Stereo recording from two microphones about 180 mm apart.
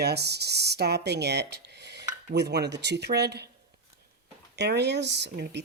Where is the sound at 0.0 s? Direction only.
65° right (ahead or behind).